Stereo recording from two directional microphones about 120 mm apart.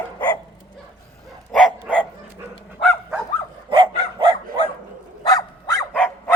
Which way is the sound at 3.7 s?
45° right (ahead or behind).